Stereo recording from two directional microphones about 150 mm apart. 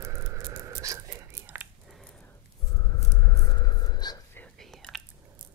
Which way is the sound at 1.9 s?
Centre (ahead or behind).